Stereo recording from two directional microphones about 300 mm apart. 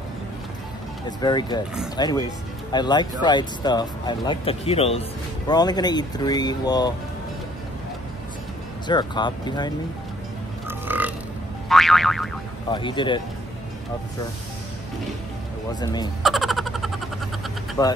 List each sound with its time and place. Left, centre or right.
1.0 s speech: centre
8.8 s speech: centre
10.7 s burping: centre
11.7 s boing: centre
12.7 s speech: centre
15.8 s speech: centre
16.2 s a sound: centre
17.8 s speech: centre